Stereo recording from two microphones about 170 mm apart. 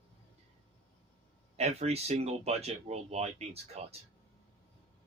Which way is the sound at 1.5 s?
40° right (ahead or behind).